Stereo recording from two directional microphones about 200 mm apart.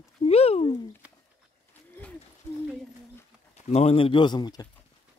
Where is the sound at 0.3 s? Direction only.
30° left (ahead or behind).